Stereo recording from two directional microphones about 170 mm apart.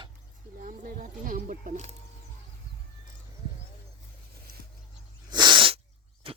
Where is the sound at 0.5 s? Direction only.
50° right (ahead or behind).